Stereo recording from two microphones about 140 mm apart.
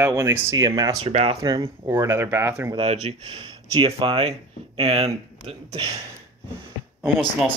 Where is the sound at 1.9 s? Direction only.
20° right (ahead or behind).